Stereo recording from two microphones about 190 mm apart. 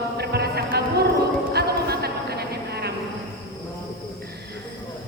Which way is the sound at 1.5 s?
55° right (ahead or behind).